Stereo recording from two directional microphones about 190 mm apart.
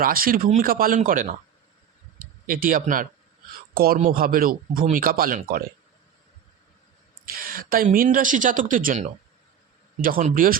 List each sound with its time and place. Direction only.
0.0 s speech: 50° right (ahead or behind)
2.5 s speech: 45° right (ahead or behind)
3.5 s a sound: 50° right (ahead or behind)
3.9 s speech: 45° right (ahead or behind)
7.3 s speech: 50° right (ahead or behind)